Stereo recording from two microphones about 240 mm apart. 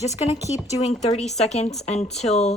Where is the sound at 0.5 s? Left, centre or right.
Left.